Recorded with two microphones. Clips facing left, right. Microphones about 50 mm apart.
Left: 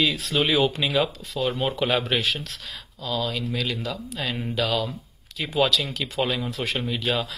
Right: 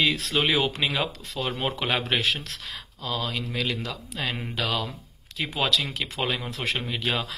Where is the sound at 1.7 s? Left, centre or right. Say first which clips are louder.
Left 2 dB; right.